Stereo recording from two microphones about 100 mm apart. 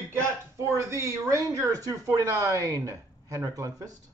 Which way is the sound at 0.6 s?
30° right (ahead or behind).